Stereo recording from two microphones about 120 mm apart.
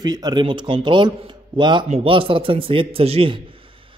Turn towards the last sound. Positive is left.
turn(degrees=-50)  # may be behind; listen again after turning